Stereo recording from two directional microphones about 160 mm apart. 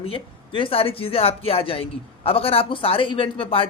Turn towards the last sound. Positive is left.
turn(degrees=35)  # may be behind; listen again after turning